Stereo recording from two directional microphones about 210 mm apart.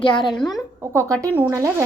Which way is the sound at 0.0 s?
25° left (ahead or behind).